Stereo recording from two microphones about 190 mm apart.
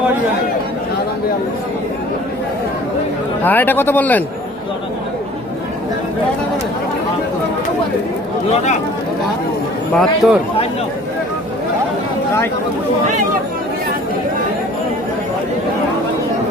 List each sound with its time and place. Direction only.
3.4 s a man's voice: 10° left (ahead or behind)
9.9 s speech: centre (ahead or behind)